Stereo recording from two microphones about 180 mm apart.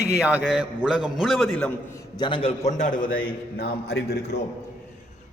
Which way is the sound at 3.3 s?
55° left (ahead or behind).